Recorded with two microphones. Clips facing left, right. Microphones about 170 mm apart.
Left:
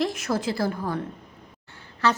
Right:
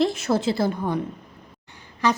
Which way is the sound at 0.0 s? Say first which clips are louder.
Right 4 dB; 30° right (ahead or behind).